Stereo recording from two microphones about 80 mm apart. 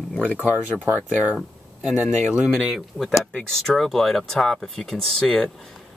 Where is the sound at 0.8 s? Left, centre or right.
Right.